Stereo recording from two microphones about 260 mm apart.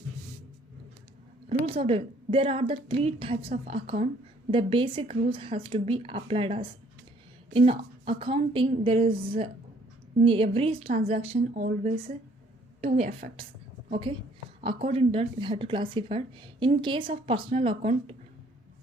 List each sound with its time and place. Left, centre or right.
1.5 s speech: right